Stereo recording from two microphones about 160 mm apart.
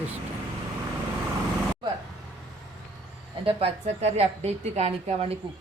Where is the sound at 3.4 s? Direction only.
40° right (ahead or behind).